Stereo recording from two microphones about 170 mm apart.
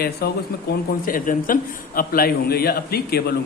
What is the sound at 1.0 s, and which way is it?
A man's voice, 55° left (ahead or behind).